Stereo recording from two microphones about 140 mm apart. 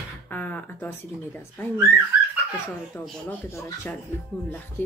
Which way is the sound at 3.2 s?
15° left (ahead or behind).